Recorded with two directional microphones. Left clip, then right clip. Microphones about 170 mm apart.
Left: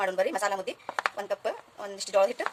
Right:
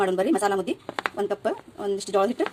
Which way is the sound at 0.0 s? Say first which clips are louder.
Right 5 dB; centre (ahead or behind).